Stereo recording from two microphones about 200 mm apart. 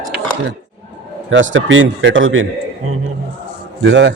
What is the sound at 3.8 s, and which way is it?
Speech, 65° right (ahead or behind).